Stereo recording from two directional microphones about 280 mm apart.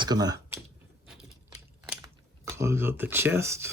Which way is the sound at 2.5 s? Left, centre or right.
Centre.